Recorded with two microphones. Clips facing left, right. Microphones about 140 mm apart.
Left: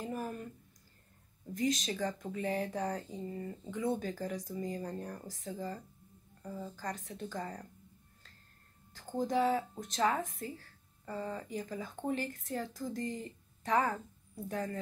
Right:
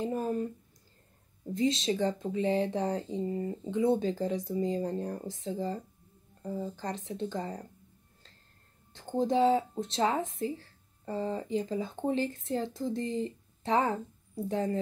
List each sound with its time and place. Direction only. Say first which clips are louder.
0.0 s a sound: right 8 dB; 25° right (ahead or behind)
1.5 s speech: right 5 dB; 25° right (ahead or behind)
8.9 s speech: right 5 dB; 30° right (ahead or behind)